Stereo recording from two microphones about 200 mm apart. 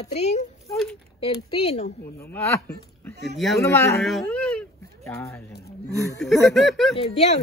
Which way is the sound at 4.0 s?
Centre (ahead or behind).